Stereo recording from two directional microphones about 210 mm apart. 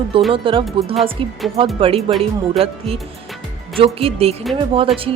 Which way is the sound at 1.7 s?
25° right (ahead or behind).